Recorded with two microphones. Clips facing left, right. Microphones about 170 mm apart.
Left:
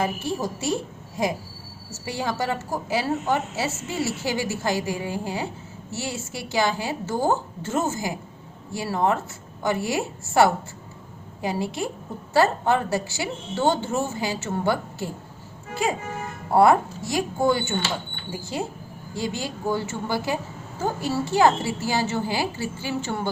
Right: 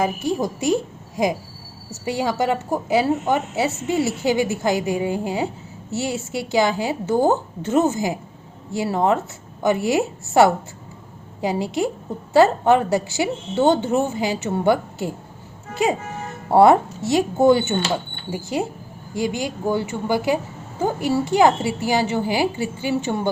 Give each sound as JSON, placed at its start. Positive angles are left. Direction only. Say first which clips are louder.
{"t": 0.0, "sound": "a woman's voice", "louder": "right 4 dB", "side_deg": -15}